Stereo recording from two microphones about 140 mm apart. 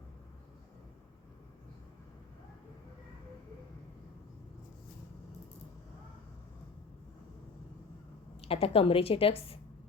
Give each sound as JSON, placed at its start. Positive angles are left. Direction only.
{"t": 8.4, "sound": "a woman's voice", "side_deg": 45}